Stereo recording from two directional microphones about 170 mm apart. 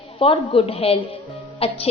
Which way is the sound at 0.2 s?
35° left (ahead or behind).